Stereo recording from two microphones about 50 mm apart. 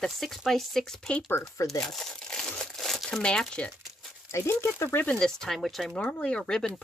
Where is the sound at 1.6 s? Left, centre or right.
Centre.